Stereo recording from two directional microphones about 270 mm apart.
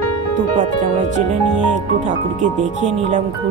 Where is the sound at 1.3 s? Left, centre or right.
Right.